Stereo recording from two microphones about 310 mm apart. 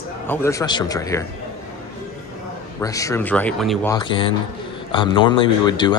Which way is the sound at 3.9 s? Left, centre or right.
Centre.